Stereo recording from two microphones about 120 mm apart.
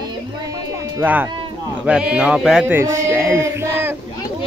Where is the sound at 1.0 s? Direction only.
15° right (ahead or behind).